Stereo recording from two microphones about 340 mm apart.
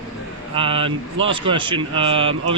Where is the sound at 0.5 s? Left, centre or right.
Centre.